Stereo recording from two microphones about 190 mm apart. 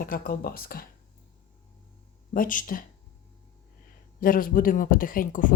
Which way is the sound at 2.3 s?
45° left (ahead or behind).